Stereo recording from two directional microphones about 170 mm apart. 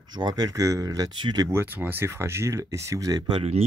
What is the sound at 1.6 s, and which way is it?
Speech, 10° right (ahead or behind).